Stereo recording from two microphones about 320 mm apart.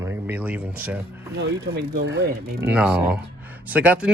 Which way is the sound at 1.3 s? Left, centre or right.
Right.